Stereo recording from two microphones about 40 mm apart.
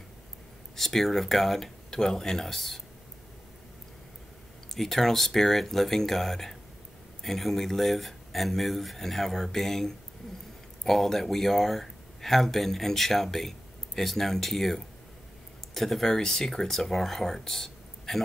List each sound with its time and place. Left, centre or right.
0.7 s speech: centre
4.7 s speech: centre